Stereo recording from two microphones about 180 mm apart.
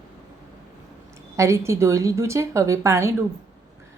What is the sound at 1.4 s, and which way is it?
Speech, 15° right (ahead or behind).